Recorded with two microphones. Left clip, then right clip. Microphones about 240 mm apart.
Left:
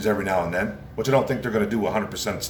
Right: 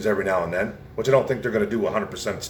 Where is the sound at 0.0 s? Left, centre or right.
Centre.